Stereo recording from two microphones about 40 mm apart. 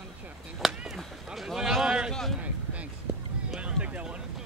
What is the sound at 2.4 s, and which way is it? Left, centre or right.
Speech, right.